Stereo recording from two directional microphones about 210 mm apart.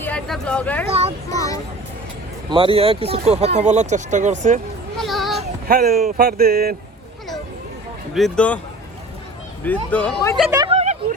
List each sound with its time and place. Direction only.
0.0 s speech: 5° left (ahead or behind)
0.9 s a sound: 30° right (ahead or behind)
2.5 s speech: 25° right (ahead or behind)
4.9 s a sound: centre (ahead or behind)
5.6 s speech: 45° right (ahead or behind)
8.1 s speech: 5° left (ahead or behind)
9.6 s speech: 5° left (ahead or behind)
10.5 s speech: 20° right (ahead or behind)